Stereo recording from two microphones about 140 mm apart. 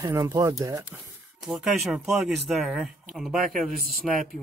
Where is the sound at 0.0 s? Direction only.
20° right (ahead or behind).